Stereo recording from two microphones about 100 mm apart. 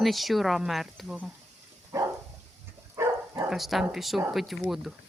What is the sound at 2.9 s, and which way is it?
Dog, 30° right (ahead or behind).